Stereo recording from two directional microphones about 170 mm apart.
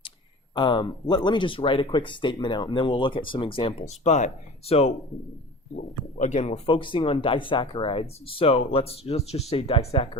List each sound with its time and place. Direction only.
0.5 s speech: 30° left (ahead or behind)
6.1 s speech: 45° left (ahead or behind)